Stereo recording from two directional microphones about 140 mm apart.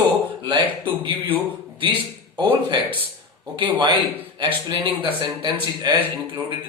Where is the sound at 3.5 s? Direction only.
35° right (ahead or behind).